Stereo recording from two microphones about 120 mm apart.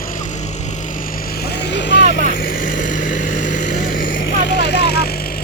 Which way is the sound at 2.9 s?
90° left.